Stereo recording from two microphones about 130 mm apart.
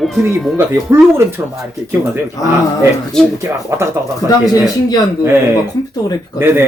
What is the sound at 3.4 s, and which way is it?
Speech, 20° right (ahead or behind).